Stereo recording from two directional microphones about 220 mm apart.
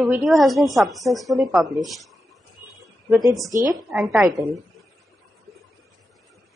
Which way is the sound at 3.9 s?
Centre (ahead or behind).